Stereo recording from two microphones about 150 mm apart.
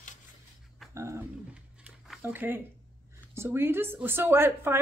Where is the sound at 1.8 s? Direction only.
Centre (ahead or behind).